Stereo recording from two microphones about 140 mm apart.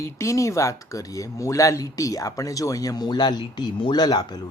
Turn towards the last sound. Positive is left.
turn(degrees=30)  # may be behind; listen again after turning